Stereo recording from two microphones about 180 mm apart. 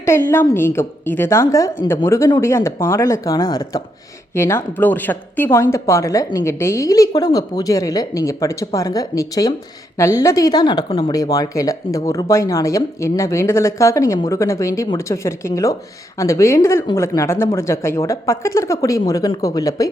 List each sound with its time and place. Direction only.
0.0 s a woman's voice: 15° left (ahead or behind); by 11.1 s 30° left (ahead or behind)
11.1 s a woman's voice: 20° left (ahead or behind)